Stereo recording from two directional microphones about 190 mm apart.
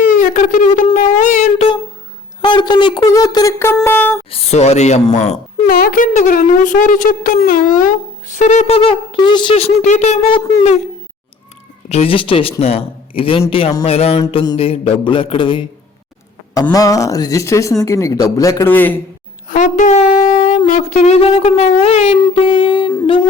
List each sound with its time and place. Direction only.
0.2 s a sound: 40° left (ahead or behind)
2.4 s speech: 25° left (ahead or behind)
4.3 s speech: 35° left (ahead or behind)
5.6 s a woman's voice: 50° left (ahead or behind); by 10.6 s 25° left (ahead or behind)
11.9 s speech: 30° left (ahead or behind)
16.7 s speech: 15° left (ahead or behind)
19.5 s a sound: 40° left (ahead or behind)
20.7 s speech: 40° left (ahead or behind)